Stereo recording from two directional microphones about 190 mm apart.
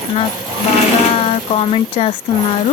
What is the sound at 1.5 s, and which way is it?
Speech, 30° left (ahead or behind).